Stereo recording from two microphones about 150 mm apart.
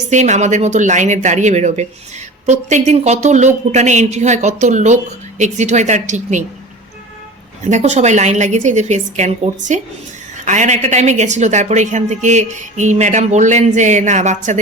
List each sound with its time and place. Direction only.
0.1 s a woman's voice: 50° right (ahead or behind)
7.7 s a woman's voice: 50° right (ahead or behind)